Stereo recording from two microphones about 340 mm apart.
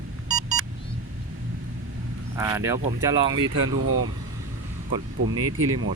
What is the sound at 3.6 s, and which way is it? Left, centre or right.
Speech, right.